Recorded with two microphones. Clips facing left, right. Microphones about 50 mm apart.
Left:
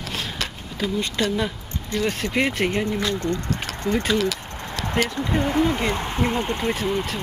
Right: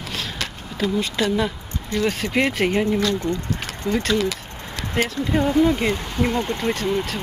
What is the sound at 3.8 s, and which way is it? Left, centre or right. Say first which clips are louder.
Speech: even; centre.